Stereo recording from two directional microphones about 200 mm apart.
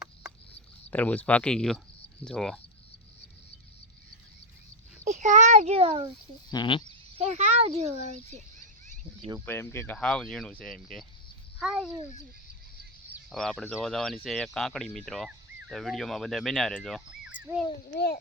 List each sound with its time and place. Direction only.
0.9 s speech: 10° left (ahead or behind)
5.0 s a child's voice: 35° right (ahead or behind)
6.5 s speech: 25° left (ahead or behind)
7.2 s speech: 35° right (ahead or behind)
9.5 s speech: 10° left (ahead or behind)
13.1 s speech: centre (ahead or behind)